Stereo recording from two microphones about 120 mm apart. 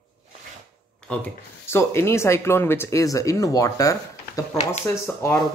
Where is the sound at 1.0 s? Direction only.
15° left (ahead or behind).